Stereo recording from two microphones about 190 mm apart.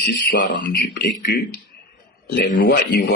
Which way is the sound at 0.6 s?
50° left (ahead or behind).